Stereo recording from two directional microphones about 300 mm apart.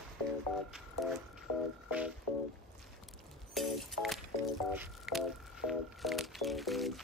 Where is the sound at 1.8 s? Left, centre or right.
Centre.